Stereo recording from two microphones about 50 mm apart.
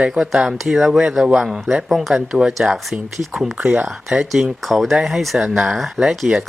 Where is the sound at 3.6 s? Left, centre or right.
Right.